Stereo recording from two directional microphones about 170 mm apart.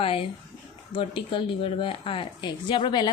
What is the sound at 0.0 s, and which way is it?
A woman's voice, 35° left (ahead or behind).